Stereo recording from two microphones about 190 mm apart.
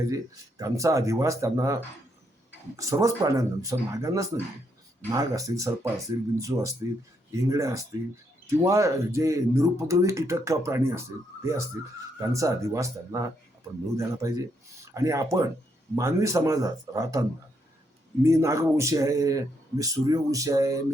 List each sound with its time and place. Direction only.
0.6 s a man's voice: 15° right (ahead or behind)